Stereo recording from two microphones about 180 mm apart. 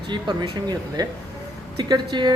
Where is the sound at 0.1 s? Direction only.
25° right (ahead or behind).